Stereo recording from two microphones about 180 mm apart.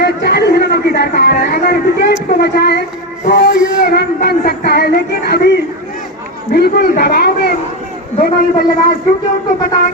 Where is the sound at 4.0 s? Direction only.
60° left (ahead or behind).